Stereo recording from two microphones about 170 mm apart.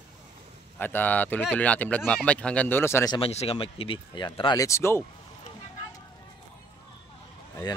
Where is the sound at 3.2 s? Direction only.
35° left (ahead or behind); by 5.0 s 15° left (ahead or behind).